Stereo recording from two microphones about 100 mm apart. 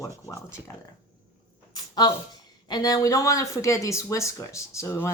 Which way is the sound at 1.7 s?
45° left (ahead or behind).